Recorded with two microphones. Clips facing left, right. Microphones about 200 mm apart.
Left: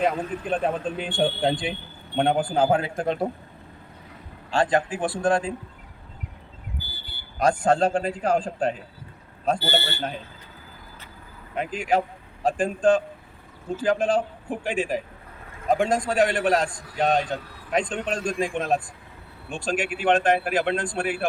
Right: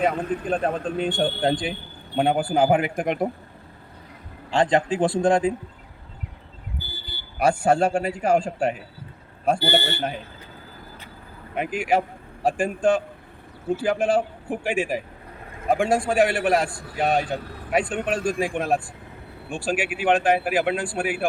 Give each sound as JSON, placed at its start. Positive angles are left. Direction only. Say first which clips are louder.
{"t": 0.0, "sound": "a man's voice", "louder": "right 1 dB", "side_deg": 0}
{"t": 4.5, "sound": "speech", "louder": "right 2 dB", "side_deg": -20}
{"t": 7.3, "sound": "a man's voice", "louder": "right 1 dB", "side_deg": -10}
{"t": 11.5, "sound": "a man's voice", "louder": "right 1 dB", "side_deg": -10}